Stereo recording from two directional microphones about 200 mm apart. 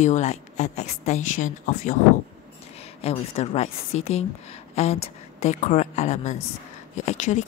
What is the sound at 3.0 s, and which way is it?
Speech, 30° left (ahead or behind).